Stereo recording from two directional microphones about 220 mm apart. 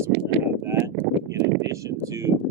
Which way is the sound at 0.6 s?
10° right (ahead or behind).